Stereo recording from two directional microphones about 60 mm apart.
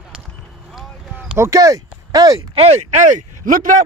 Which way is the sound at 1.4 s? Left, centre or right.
Right.